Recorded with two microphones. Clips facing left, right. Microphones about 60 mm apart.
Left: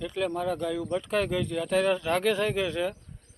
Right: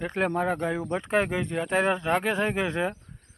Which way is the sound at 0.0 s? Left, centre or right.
Right.